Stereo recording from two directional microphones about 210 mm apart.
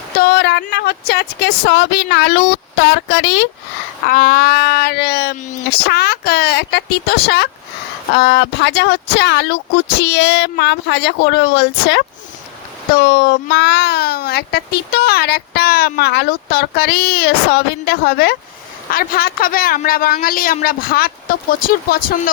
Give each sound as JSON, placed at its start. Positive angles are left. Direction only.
{"t": 0.2, "sound": "a sound", "side_deg": 55}
{"t": 0.7, "sound": "speech", "side_deg": 50}
{"t": 4.0, "sound": "speech", "side_deg": 45}